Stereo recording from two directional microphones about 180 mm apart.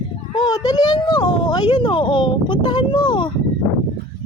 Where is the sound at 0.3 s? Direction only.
20° left (ahead or behind).